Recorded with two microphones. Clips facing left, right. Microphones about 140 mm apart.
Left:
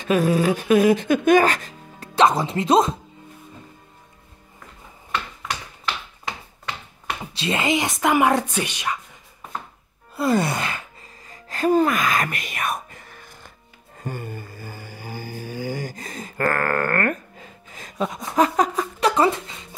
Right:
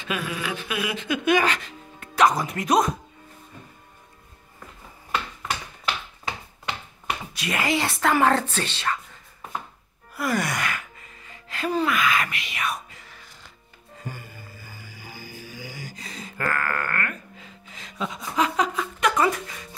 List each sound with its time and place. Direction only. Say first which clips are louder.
0.0 s speech: left 11 dB; 40° left (ahead or behind)
2.1 s speech: left 3 dB; 25° left (ahead or behind)
7.3 s speech: left 3 dB; 25° left (ahead or behind)
10.1 s gasp: left 5 dB; 25° left (ahead or behind); by 13.5 s 50° left (ahead or behind)
13.9 s music: left 7 dB; 55° left (ahead or behind)
18.9 s a sound: left 3 dB; 30° left (ahead or behind)